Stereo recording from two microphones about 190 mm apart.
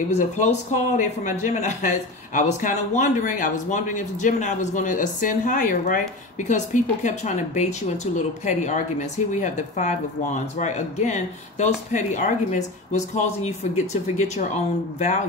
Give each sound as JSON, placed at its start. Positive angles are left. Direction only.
{"t": 0.1, "sound": "speech", "side_deg": 40}